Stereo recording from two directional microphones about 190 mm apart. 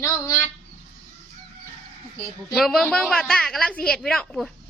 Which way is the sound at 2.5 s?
Centre (ahead or behind).